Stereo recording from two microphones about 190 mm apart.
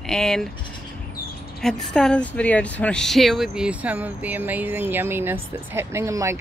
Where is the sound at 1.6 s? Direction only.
5° left (ahead or behind).